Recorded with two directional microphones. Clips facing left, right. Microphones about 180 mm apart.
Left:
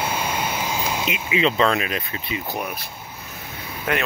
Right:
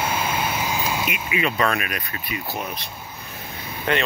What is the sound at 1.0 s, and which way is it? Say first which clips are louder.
Speech: left 3 dB; 25° left (ahead or behind).